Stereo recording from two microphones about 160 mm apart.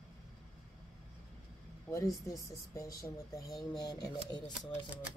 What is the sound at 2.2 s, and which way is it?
Speech, 20° left (ahead or behind).